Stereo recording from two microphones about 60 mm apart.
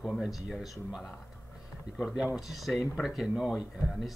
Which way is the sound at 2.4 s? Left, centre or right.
Centre.